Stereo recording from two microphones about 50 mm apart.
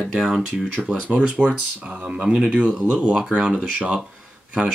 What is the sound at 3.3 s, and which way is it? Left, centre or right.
Speech, centre.